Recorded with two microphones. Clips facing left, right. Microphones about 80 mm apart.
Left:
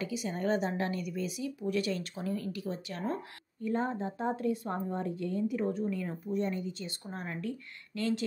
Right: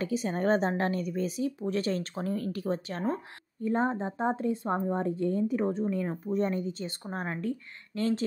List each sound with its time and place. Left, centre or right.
0.0 s a woman's voice: right